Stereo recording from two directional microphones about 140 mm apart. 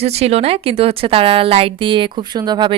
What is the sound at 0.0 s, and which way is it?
A woman's voice, 50° right (ahead or behind).